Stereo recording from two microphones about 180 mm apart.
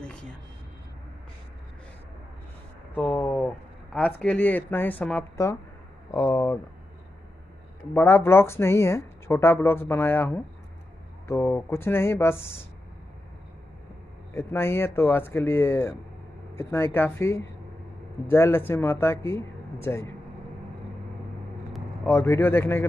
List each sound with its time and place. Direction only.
0.0 s a sound: 5° left (ahead or behind)
2.9 s speech: 10° left (ahead or behind)
7.9 s speech: 15° left (ahead or behind)
14.3 s speech: 15° left (ahead or behind)
22.0 s speech: 15° left (ahead or behind)